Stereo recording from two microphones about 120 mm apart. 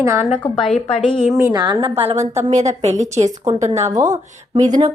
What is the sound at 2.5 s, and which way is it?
Speech, 75° right (ahead or behind).